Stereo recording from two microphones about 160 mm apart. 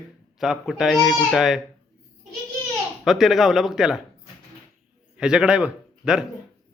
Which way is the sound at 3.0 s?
Centre (ahead or behind).